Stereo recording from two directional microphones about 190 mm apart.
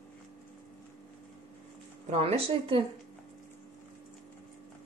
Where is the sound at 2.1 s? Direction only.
30° right (ahead or behind).